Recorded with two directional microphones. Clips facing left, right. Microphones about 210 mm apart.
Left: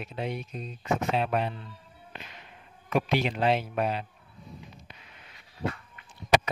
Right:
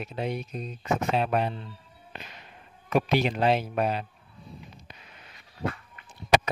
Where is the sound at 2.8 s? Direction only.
40° right (ahead or behind).